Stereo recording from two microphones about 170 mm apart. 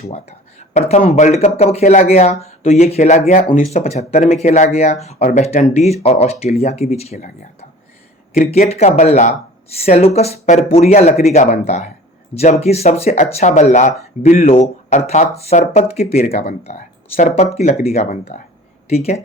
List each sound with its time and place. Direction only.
0.0 s speech: 40° left (ahead or behind)
8.4 s speech: 40° left (ahead or behind)